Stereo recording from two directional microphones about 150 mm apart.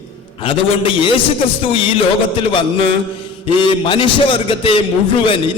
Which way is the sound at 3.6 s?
35° left (ahead or behind).